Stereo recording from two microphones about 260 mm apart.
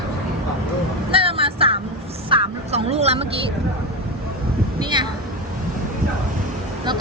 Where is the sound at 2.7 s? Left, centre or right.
Right.